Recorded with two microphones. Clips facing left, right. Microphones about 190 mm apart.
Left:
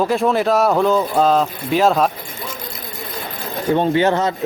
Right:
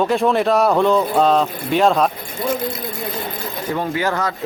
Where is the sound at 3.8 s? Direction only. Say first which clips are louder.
Left 5 dB; 25° left (ahead or behind).